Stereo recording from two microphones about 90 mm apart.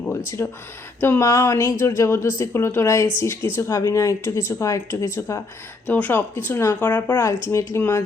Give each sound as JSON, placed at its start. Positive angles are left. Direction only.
{"t": 0.4, "sound": "speech", "side_deg": 25}
{"t": 5.9, "sound": "speech", "side_deg": 20}
{"t": 7.3, "sound": "speech", "side_deg": 35}